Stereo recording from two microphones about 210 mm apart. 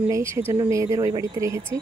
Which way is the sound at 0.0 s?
10° right (ahead or behind).